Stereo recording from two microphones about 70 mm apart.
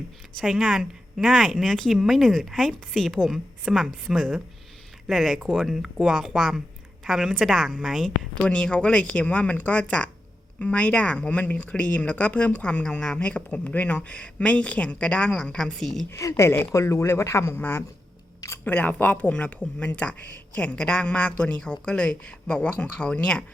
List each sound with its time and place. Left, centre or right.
0.4 s speech: centre
8.4 s speech: centre
16.0 s speech: left
18.3 s a sound: left
18.6 s speech: left